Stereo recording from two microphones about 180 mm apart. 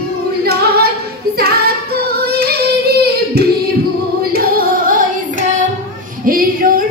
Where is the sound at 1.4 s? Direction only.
60° right (ahead or behind).